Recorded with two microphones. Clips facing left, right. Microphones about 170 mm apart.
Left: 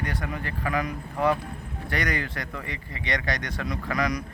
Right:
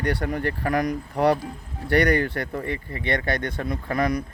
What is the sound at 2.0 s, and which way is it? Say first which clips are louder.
Speech: right 9 dB; 60° right (ahead or behind).